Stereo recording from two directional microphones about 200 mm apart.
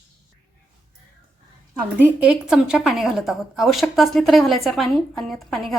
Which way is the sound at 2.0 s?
5° right (ahead or behind).